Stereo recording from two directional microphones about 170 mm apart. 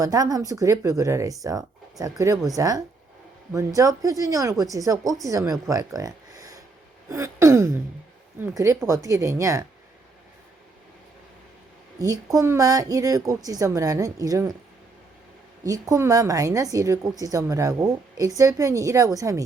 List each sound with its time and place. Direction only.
0.0 s a woman's voice: 20° right (ahead or behind)
11.9 s a woman's voice: 20° right (ahead or behind)
15.6 s a woman's voice: 20° right (ahead or behind)